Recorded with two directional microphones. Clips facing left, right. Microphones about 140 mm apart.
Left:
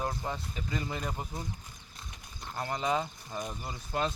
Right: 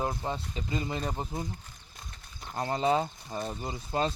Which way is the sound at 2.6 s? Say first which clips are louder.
Right 4 dB; 30° right (ahead or behind).